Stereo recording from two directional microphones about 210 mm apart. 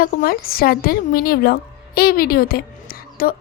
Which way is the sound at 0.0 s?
45° left (ahead or behind).